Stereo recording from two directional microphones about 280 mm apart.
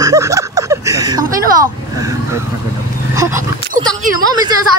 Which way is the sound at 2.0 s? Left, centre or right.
Centre.